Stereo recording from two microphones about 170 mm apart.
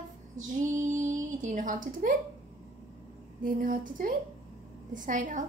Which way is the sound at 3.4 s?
55° right (ahead or behind).